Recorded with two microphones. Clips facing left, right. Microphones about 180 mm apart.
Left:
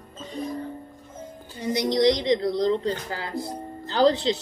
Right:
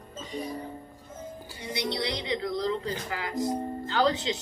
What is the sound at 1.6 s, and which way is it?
Speech, 40° left (ahead or behind).